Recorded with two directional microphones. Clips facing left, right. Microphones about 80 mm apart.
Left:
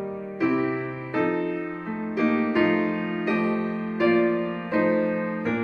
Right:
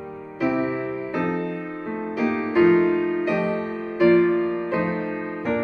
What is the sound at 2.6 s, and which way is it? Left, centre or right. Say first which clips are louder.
Music: right 6 dB; centre.